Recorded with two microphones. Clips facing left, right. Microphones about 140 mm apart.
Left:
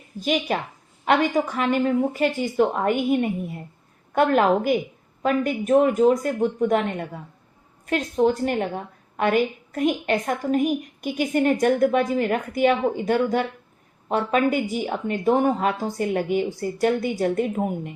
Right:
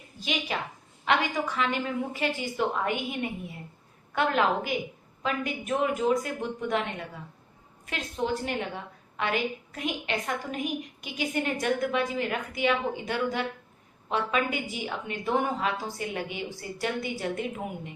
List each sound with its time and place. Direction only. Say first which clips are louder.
0.2 s a woman's voice: left 8 dB; 45° left (ahead or behind)